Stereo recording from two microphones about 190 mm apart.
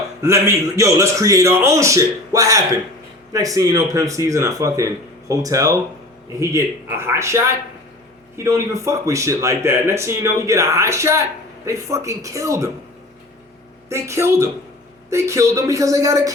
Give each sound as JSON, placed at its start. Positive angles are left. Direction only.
{"t": 0.2, "sound": "speech", "side_deg": -15}
{"t": 8.4, "sound": "speech", "side_deg": -15}
{"t": 13.9, "sound": "speech", "side_deg": -15}